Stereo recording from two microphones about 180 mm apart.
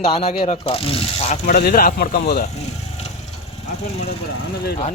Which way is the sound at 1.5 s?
55° left (ahead or behind).